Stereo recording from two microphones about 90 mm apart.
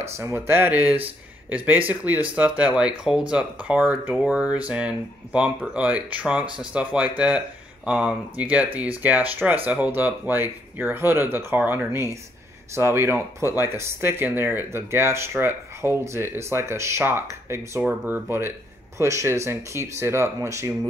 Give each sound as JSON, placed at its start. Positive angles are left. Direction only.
{"t": 0.0, "sound": "speech", "side_deg": -30}